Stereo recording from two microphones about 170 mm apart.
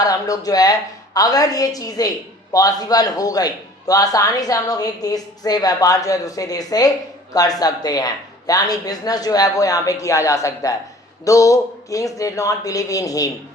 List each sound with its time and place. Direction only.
0.0 s a woman's voice: 20° left (ahead or behind)